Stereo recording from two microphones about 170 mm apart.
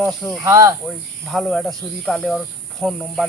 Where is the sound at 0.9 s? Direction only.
Centre (ahead or behind).